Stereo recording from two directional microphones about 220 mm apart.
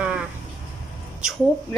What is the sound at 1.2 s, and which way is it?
Speech, centre (ahead or behind).